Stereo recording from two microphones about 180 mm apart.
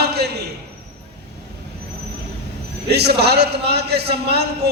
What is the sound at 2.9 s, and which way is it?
A man's voice, 65° right (ahead or behind).